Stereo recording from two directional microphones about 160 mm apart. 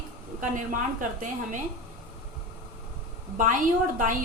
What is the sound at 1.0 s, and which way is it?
Speech, 50° right (ahead or behind).